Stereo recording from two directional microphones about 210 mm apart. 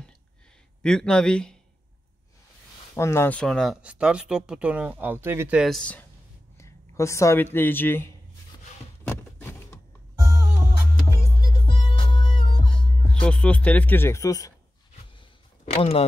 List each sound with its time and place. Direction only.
0.8 s speech: 5° left (ahead or behind)
2.9 s speech: 10° left (ahead or behind)
6.6 s a sound: 15° left (ahead or behind)
7.5 s speech: 10° left (ahead or behind)
9.0 s a sound: 10° left (ahead or behind)
11.6 s music: 25° left (ahead or behind)
13.1 s speech: 5° left (ahead or behind)
15.6 s speech: 30° left (ahead or behind)